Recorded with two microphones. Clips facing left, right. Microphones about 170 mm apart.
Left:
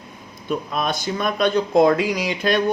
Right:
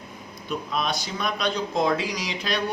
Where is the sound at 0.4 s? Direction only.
50° left (ahead or behind).